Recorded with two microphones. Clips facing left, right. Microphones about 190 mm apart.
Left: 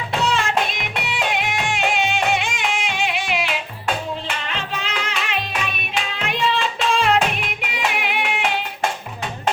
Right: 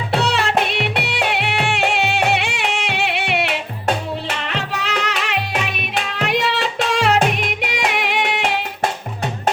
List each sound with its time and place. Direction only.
0.2 s music: 70° right (ahead or behind)